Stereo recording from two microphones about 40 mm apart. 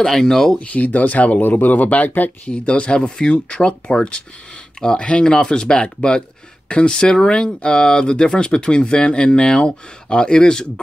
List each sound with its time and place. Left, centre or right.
0.0 s speech: centre
0.6 s speech: left; by 10.7 s centre